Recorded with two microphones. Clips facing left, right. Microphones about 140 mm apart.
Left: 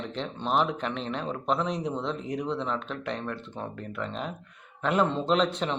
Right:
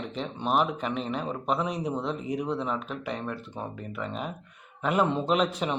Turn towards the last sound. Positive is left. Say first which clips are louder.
# even
turn(degrees=-5)  # may be behind; listen again after turning